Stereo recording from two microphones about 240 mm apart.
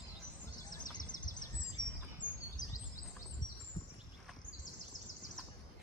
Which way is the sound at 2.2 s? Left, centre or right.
Centre.